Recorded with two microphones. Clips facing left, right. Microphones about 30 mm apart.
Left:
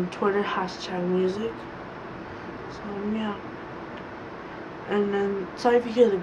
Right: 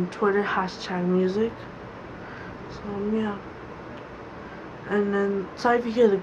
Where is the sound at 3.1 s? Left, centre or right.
Centre.